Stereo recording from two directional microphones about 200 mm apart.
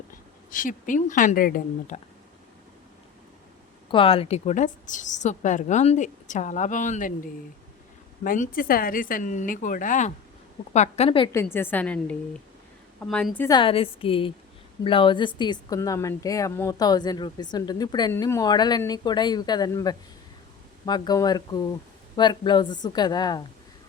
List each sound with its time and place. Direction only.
0.5 s a woman's voice: 40° left (ahead or behind)
3.9 s a woman's voice: 25° left (ahead or behind)
8.2 s a woman's voice: 40° left (ahead or behind)
11.5 s a woman's voice: 10° left (ahead or behind)
13.5 s a woman's voice: 25° left (ahead or behind)